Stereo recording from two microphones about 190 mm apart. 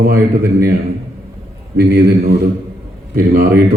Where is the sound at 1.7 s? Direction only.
55° right (ahead or behind).